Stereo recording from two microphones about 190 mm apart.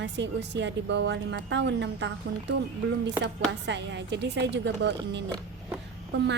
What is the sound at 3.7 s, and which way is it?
A woman's voice, 65° right (ahead or behind).